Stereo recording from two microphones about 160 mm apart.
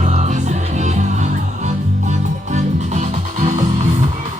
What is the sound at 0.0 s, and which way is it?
Music, 45° right (ahead or behind).